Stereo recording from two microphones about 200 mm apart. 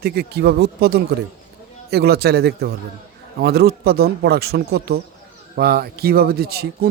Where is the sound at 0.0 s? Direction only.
55° right (ahead or behind).